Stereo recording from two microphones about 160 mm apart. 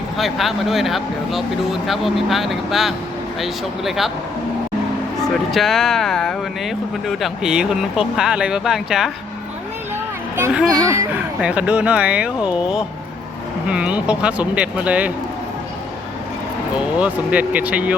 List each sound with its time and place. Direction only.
0.2 s speech: centre (ahead or behind)
5.3 s speech: centre (ahead or behind)
10.3 s speech: 10° right (ahead or behind)
11.3 s speech: 5° right (ahead or behind)
16.7 s speech: 5° right (ahead or behind)